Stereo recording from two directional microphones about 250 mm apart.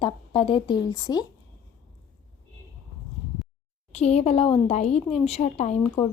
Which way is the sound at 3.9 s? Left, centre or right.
Left.